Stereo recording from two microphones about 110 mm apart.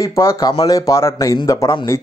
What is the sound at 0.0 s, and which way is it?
Speech, 25° left (ahead or behind).